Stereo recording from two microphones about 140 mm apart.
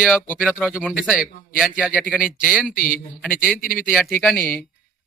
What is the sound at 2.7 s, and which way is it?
Speech, 75° left (ahead or behind).